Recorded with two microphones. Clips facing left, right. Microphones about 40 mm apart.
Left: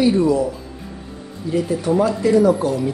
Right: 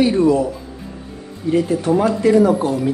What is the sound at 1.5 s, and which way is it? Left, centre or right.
A man's voice, right.